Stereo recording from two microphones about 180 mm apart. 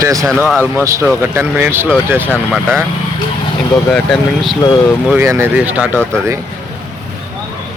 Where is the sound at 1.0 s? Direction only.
15° right (ahead or behind).